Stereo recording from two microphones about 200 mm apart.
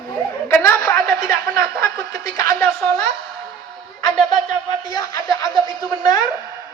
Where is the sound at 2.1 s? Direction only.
45° right (ahead or behind).